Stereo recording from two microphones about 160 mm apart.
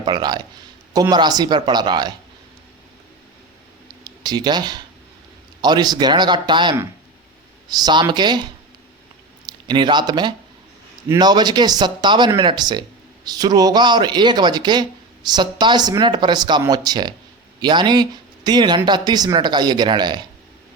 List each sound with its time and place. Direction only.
0.0 s a man's voice: 30° right (ahead or behind)
3.8 s a sound: 25° right (ahead or behind)
5.6 s a man's voice: 25° right (ahead or behind)
9.5 s a man's voice: 30° right (ahead or behind)